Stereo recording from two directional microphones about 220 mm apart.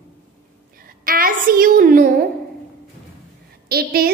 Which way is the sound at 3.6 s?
45° right (ahead or behind).